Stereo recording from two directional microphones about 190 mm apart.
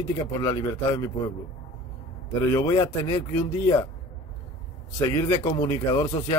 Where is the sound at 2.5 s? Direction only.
20° left (ahead or behind).